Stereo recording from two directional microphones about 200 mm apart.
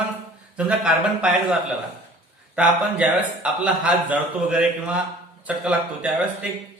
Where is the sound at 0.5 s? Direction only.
5° right (ahead or behind).